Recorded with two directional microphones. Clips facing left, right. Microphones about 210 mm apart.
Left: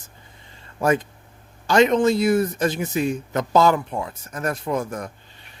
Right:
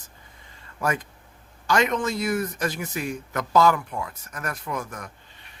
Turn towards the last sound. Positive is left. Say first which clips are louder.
# left 7 dB
turn(degrees=30)  # may be behind; listen again after turning